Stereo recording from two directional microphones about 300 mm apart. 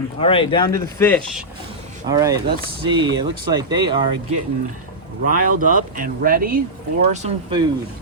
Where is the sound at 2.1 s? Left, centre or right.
Centre.